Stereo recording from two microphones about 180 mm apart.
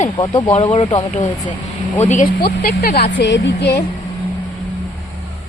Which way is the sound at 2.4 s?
55° left (ahead or behind).